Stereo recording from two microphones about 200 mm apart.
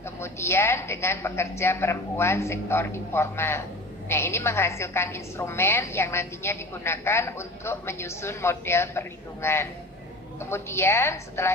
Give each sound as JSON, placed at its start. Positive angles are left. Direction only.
{"t": 0.2, "sound": "a woman's voice", "side_deg": 15}